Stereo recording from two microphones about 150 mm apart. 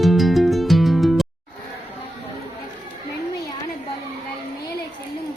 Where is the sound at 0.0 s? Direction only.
Centre (ahead or behind).